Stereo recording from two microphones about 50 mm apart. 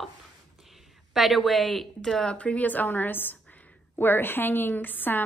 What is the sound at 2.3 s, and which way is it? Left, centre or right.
A woman's voice, left.